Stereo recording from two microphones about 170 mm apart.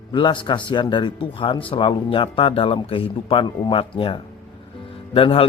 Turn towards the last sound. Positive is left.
turn(degrees=30)  # may be behind; listen again after turning